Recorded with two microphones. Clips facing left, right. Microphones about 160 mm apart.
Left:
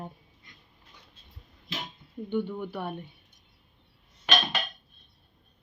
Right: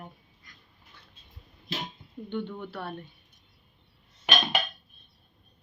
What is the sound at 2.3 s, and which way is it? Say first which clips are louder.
Speech: left 4 dB; 10° left (ahead or behind).